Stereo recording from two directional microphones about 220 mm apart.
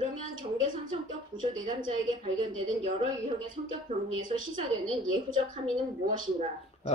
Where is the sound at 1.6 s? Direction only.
35° right (ahead or behind).